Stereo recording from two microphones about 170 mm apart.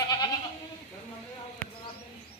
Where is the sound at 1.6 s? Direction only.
10° left (ahead or behind).